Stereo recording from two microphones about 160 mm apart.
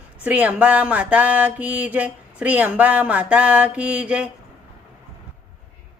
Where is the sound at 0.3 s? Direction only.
10° right (ahead or behind).